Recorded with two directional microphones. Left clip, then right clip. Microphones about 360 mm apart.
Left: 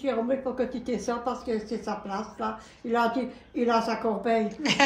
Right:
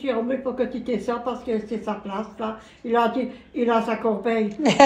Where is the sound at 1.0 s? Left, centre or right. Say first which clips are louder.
Right 3 dB; centre.